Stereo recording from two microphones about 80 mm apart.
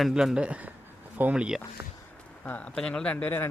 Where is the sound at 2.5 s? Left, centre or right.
Centre.